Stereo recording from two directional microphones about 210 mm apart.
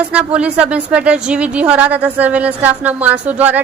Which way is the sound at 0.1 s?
5° right (ahead or behind).